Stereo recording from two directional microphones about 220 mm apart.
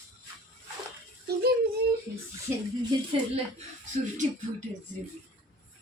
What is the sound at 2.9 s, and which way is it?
Speech, 20° right (ahead or behind).